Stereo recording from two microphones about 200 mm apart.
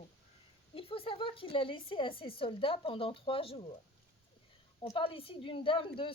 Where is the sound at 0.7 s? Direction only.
30° left (ahead or behind).